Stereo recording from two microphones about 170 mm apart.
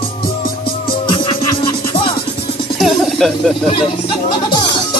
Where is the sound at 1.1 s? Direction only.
30° left (ahead or behind).